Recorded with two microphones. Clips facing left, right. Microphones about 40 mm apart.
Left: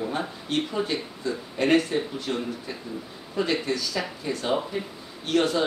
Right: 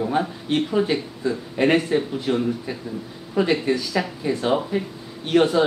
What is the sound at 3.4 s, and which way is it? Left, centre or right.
A man's voice, right.